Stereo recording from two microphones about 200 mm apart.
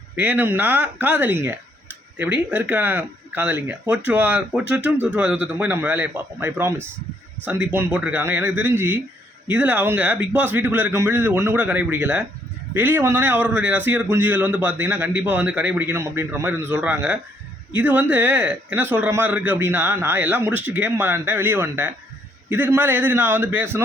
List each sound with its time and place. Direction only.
0.2 s a man's voice: 10° right (ahead or behind)